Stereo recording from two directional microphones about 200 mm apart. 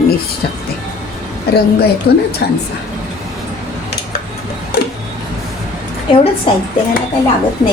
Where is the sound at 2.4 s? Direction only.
55° left (ahead or behind).